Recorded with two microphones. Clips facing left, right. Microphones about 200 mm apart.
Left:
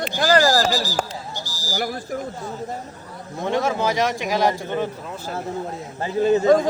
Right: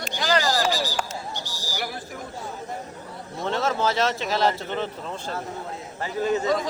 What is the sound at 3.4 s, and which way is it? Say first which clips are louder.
Speech: left 3 dB; 15° left (ahead or behind).